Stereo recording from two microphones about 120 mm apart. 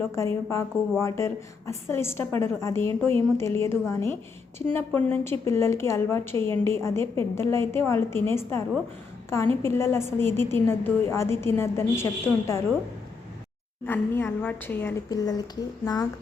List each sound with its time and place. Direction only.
0.2 s a woman's voice: 25° left (ahead or behind)
13.8 s a woman's voice: 20° left (ahead or behind)
15.1 s a woman's voice: 30° left (ahead or behind)